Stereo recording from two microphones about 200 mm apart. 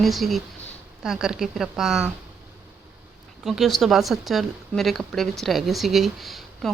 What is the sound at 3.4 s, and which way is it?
A woman's voice, centre (ahead or behind).